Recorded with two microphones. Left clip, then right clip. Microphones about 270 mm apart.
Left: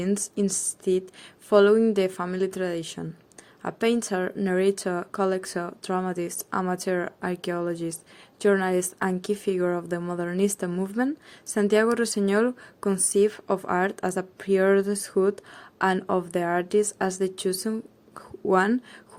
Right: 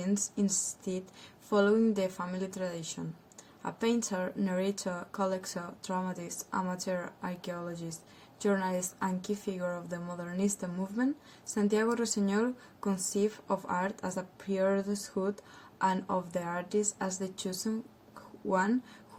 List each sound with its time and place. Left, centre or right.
0.0 s speech: left